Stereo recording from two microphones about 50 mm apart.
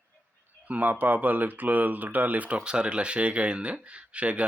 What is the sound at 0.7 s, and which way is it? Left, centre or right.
Speech, right.